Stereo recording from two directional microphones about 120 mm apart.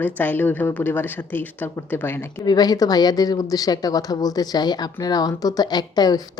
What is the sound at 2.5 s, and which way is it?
Speech, 35° left (ahead or behind).